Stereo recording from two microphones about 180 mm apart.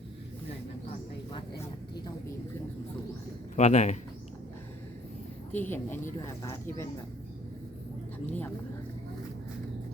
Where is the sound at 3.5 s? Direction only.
40° left (ahead or behind).